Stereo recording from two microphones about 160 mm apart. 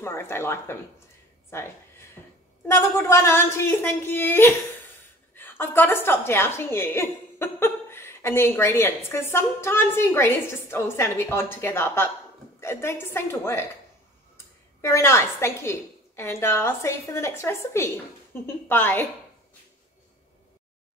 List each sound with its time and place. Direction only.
0.0 s a woman's voice: 15° left (ahead or behind)
2.7 s a woman's voice: 20° left (ahead or behind)